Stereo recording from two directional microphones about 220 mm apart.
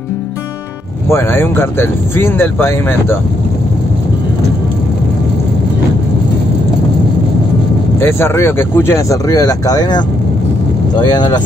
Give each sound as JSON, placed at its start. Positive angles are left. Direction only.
{"t": 1.1, "sound": "speech", "side_deg": 10}
{"t": 8.0, "sound": "speech", "side_deg": 10}